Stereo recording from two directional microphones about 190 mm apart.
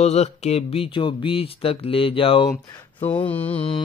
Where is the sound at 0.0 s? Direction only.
35° left (ahead or behind).